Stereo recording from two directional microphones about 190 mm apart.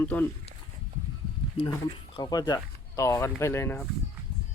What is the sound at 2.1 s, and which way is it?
Speech, 20° left (ahead or behind).